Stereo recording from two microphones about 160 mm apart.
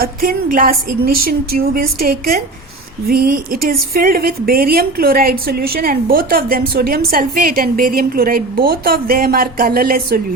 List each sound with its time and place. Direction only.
0.0 s a woman's voice: 65° right (ahead or behind)